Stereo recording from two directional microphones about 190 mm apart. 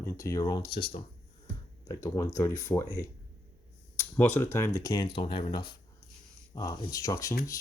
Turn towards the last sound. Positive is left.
turn(degrees=15)  # may be behind; listen again after turning